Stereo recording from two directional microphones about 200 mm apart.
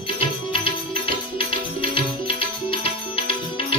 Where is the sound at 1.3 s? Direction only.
25° left (ahead or behind).